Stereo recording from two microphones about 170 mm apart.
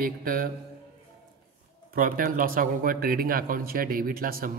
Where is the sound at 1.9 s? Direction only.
55° right (ahead or behind).